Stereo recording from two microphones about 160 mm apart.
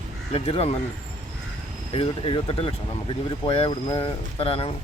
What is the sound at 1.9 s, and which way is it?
Speech, 35° left (ahead or behind).